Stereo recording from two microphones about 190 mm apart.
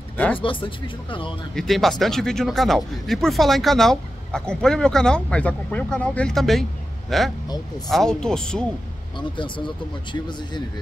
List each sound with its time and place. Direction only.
0.4 s speech: 25° left (ahead or behind)
1.5 s speech: centre (ahead or behind)
9.4 s speech: 25° left (ahead or behind)